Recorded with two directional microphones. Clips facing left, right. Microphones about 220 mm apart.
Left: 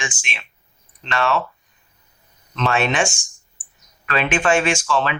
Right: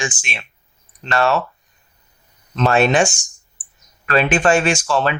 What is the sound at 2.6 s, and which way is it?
Speech, 40° right (ahead or behind).